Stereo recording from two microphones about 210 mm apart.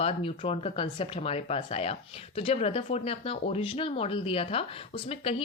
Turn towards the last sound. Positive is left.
turn(degrees=30)  # may be behind; listen again after turning